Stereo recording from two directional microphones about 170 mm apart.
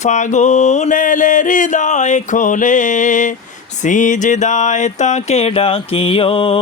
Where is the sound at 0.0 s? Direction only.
45° left (ahead or behind).